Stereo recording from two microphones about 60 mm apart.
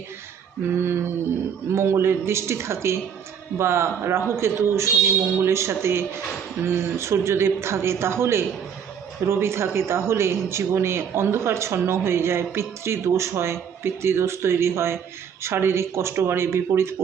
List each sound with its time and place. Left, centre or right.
0.8 s speech: right